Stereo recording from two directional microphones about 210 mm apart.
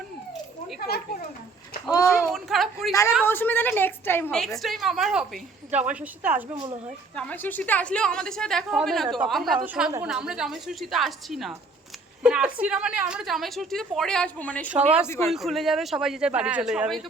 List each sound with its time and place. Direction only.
1.9 s a woman's voice: 15° left (ahead or behind)
2.1 s a woman's voice: centre (ahead or behind)
7.2 s a woman's voice: 10° left (ahead or behind)
15.3 s a woman's voice: centre (ahead or behind)